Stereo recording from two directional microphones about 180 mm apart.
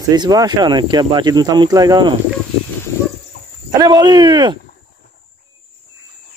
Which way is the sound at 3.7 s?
20° right (ahead or behind).